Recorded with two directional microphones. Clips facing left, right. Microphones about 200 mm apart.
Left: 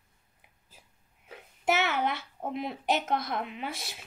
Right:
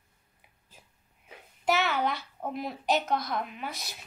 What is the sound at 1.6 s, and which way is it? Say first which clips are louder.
Speech: even; 20° left (ahead or behind).